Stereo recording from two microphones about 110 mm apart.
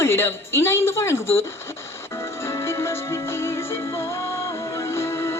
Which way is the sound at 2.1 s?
25° left (ahead or behind).